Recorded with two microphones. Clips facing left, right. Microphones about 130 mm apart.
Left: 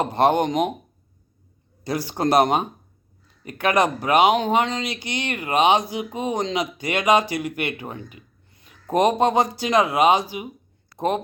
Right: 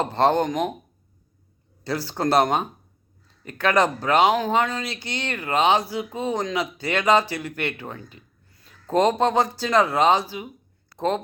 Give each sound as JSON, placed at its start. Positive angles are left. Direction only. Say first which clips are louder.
{"t": 0.0, "sound": "speech", "louder": "left 1 dB", "side_deg": 15}
{"t": 1.8, "sound": "a man's voice", "louder": "left 2 dB", "side_deg": 15}